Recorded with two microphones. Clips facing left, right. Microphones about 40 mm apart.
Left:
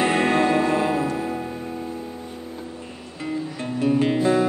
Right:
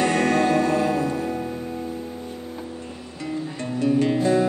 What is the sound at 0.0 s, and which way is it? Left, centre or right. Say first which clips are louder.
Music: even; centre.